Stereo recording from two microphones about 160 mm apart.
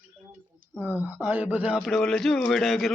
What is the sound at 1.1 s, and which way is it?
A man's voice, 10° right (ahead or behind).